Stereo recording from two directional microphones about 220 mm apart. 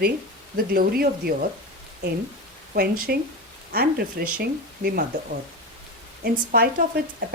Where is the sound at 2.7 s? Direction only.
45° right (ahead or behind).